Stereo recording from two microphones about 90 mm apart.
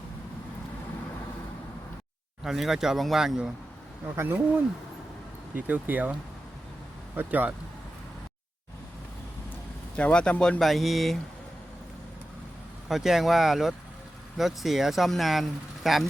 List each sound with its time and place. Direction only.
2.4 s speech: 5° right (ahead or behind)
4.1 s speech: 25° right (ahead or behind)
5.5 s speech: 20° right (ahead or behind)
7.2 s speech: 20° right (ahead or behind)
9.9 s speech: 15° left (ahead or behind)
10.6 s speech: centre (ahead or behind)
12.9 s speech: 5° right (ahead or behind)